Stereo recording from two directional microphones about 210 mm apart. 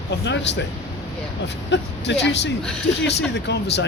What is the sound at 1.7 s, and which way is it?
Speech, 55° left (ahead or behind).